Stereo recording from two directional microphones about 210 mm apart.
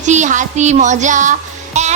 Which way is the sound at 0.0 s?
35° right (ahead or behind).